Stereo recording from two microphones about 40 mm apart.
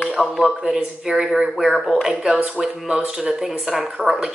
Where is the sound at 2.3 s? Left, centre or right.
Right.